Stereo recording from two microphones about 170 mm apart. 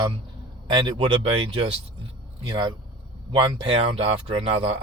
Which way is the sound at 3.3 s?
30° right (ahead or behind).